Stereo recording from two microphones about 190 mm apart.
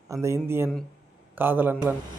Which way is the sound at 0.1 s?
15° right (ahead or behind).